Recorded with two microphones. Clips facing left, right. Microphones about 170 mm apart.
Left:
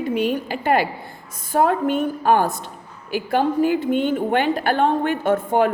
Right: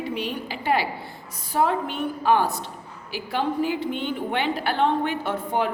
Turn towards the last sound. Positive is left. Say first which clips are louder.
# left 7 dB
turn(degrees=50)  # may be behind; listen again after turning